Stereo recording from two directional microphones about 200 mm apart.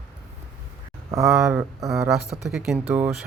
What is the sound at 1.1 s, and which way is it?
Speech, 15° right (ahead or behind).